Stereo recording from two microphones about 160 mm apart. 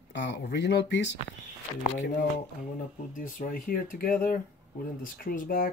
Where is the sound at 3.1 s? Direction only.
60° left (ahead or behind).